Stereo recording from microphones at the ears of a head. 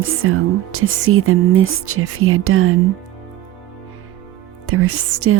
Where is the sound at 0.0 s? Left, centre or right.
Right.